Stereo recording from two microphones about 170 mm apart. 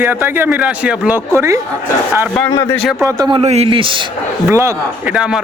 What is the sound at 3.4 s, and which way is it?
Speech, 40° right (ahead or behind).